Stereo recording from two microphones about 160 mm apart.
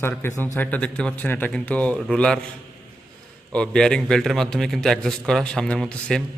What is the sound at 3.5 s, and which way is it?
A man's voice, 5° left (ahead or behind).